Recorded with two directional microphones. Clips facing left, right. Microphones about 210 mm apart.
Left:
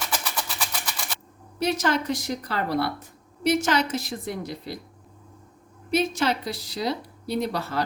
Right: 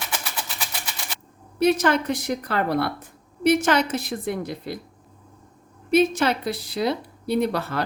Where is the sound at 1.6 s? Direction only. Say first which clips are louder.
Right 5 dB; 55° right (ahead or behind).